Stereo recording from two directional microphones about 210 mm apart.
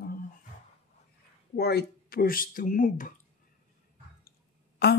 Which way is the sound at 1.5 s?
50° left (ahead or behind).